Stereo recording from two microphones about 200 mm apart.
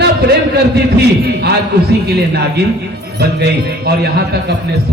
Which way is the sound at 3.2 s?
55° right (ahead or behind).